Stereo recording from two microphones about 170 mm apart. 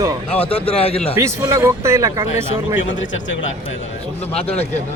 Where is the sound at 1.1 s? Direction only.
20° right (ahead or behind).